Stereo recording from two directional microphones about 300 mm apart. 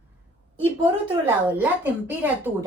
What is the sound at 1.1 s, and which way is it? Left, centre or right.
A woman's voice, centre.